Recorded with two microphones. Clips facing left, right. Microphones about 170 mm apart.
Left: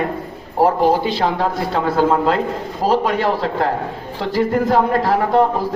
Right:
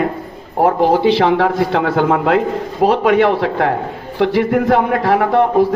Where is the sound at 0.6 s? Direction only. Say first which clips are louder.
Right 3 dB; 70° right (ahead or behind).